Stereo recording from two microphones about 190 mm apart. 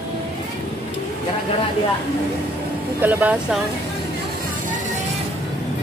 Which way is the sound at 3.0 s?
10° right (ahead or behind).